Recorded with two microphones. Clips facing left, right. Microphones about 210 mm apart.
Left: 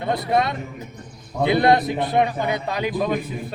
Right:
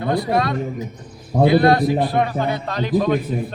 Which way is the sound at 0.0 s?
25° left (ahead or behind).